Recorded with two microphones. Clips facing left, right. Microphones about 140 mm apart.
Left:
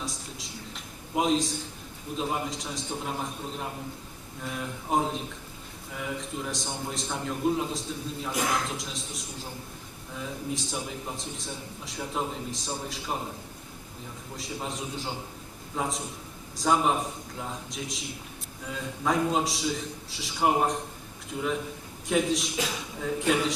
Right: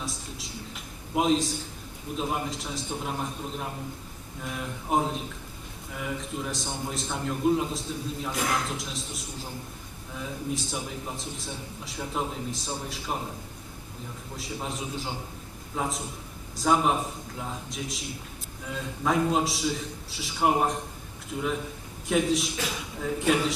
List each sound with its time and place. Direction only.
0.0 s a sound: centre (ahead or behind)
2.1 s a man's voice: centre (ahead or behind)
8.3 s speech: 10° left (ahead or behind)
8.6 s a man's voice: centre (ahead or behind)
14.3 s a man's voice: centre (ahead or behind)